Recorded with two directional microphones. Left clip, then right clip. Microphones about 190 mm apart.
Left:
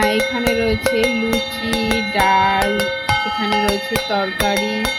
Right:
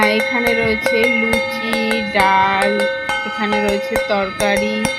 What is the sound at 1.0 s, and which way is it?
Music, 25° left (ahead or behind).